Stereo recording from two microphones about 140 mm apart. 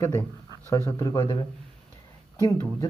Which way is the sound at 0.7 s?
25° left (ahead or behind).